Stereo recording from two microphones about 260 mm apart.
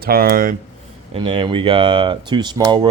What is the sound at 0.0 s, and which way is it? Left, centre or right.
Speech, right.